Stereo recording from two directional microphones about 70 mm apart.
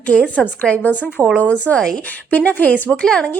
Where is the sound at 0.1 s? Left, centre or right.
Centre.